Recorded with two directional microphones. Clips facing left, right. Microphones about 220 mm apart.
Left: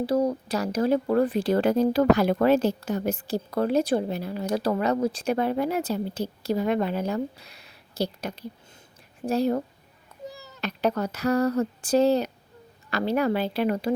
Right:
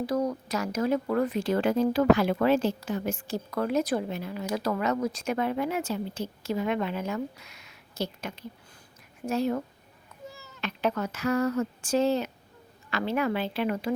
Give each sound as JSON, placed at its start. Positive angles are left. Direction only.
{"t": 0.0, "sound": "speech", "side_deg": 30}